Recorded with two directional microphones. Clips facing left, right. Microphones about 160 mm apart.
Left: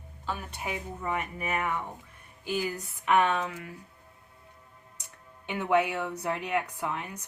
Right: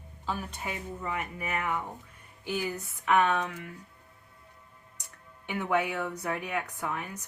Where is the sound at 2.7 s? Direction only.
20° left (ahead or behind).